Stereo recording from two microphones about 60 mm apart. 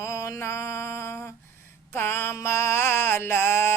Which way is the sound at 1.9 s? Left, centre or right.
Left.